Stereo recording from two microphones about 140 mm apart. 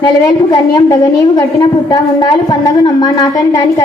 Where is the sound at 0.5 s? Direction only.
30° left (ahead or behind).